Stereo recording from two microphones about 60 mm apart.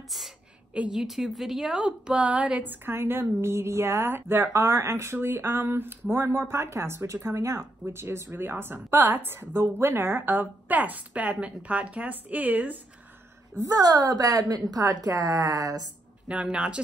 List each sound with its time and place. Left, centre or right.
0.1 s a woman's voice: centre
0.7 s a woman's voice: centre
1.0 s a woman's voice: centre; by 2.7 s right
2.7 s a woman's voice: right
13.6 s a woman's voice: right
16.3 s a woman's voice: centre